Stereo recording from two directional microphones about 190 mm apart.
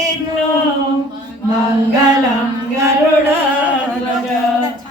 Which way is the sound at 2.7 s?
15° right (ahead or behind).